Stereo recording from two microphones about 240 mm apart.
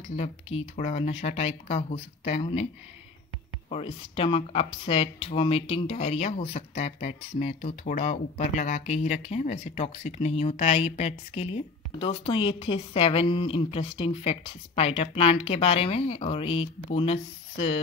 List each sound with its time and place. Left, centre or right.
0.1 s speech: left
3.7 s speech: left